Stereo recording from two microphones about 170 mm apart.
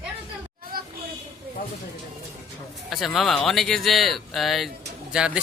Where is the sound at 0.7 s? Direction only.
60° right (ahead or behind).